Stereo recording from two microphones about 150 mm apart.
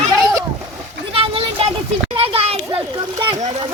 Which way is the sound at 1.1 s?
40° right (ahead or behind).